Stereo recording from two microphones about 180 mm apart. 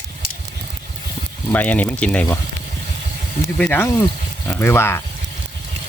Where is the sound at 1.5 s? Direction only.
10° left (ahead or behind).